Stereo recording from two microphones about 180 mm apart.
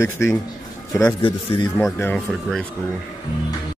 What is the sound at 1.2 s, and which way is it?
Speech, 30° left (ahead or behind).